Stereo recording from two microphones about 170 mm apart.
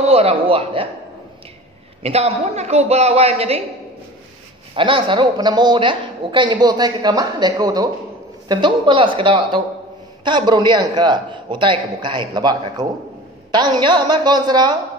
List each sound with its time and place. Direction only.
0.0 s a woman's voice: 35° right (ahead or behind)
2.0 s a woman's voice: 40° right (ahead or behind)
4.7 s a woman's voice: 30° right (ahead or behind)